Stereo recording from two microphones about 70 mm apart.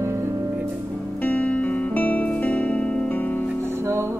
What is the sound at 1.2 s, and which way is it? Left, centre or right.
Music, left.